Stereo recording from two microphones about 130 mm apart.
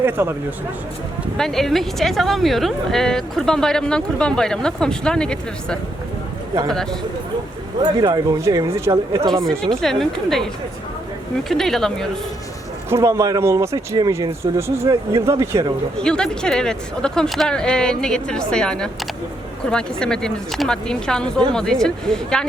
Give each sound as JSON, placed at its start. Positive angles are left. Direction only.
{"t": 0.0, "sound": "speech", "side_deg": -15}
{"t": 1.4, "sound": "speech", "side_deg": 5}
{"t": 7.8, "sound": "speech", "side_deg": -30}
{"t": 9.3, "sound": "speech", "side_deg": 5}
{"t": 12.9, "sound": "speech", "side_deg": -25}
{"t": 16.0, "sound": "speech", "side_deg": 5}